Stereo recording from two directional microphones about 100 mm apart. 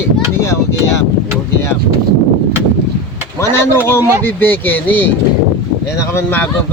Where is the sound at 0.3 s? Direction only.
25° left (ahead or behind).